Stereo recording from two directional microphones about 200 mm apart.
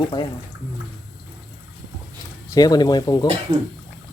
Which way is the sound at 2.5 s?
20° left (ahead or behind).